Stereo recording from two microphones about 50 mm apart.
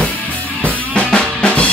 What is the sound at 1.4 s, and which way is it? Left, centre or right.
Drum, left.